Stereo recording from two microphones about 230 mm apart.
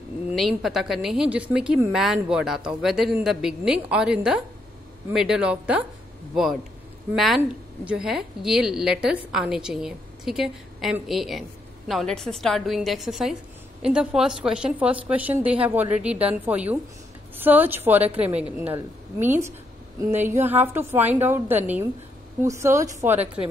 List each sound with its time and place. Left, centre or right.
0.4 s a woman's voice: centre
7.2 s a woman's voice: centre
23.1 s speech: right